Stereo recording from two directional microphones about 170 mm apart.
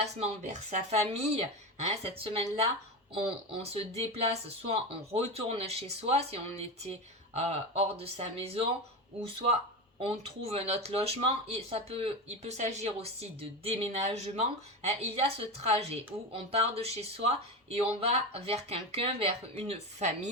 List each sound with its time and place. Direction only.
0.0 s speech: 40° right (ahead or behind)
10.0 s speech: 35° right (ahead or behind)